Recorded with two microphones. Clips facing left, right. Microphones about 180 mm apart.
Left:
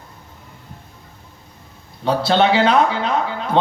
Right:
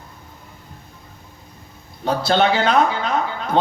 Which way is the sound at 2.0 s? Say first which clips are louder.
Left 2 dB; 45° right (ahead or behind).